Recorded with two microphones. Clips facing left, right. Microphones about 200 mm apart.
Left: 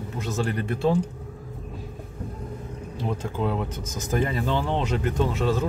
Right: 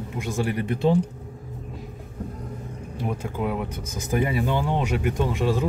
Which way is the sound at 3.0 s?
15° right (ahead or behind).